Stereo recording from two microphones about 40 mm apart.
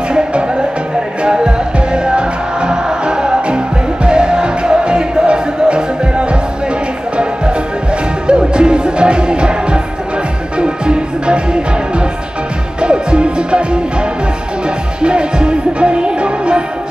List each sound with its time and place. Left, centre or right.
0.1 s music: right
8.3 s music: right
15.0 s music: right